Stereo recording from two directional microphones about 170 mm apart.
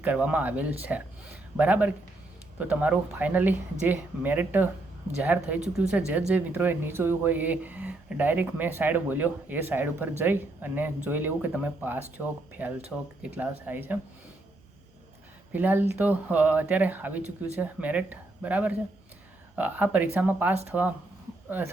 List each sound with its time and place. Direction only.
0.0 s speech: 10° right (ahead or behind)
5.5 s speech: 40° right (ahead or behind)
5.9 s speech: 10° right (ahead or behind)
15.5 s speech: 10° right (ahead or behind)